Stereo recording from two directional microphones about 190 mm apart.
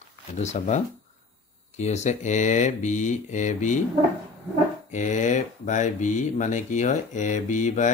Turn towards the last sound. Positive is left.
turn(degrees=40)  # may be behind; listen again after turning